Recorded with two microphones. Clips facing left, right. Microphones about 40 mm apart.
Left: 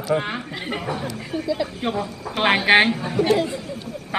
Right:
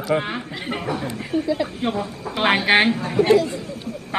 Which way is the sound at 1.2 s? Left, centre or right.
Centre.